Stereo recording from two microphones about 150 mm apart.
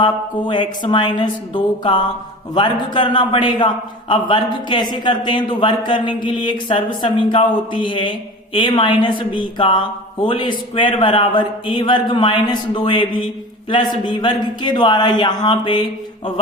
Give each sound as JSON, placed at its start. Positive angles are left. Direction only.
{"t": 0.0, "sound": "mantra", "side_deg": 30}
{"t": 4.7, "sound": "mantra", "side_deg": 30}